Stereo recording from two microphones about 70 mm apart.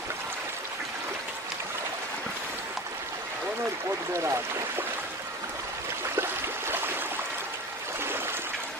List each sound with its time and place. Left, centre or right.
4.1 s speech: right